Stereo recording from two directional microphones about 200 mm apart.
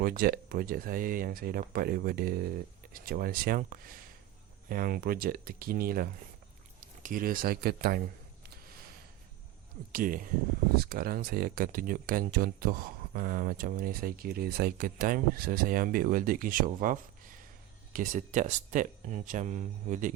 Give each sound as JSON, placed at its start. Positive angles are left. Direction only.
{"t": 0.0, "sound": "speech", "side_deg": -45}
{"t": 9.9, "sound": "speech", "side_deg": -45}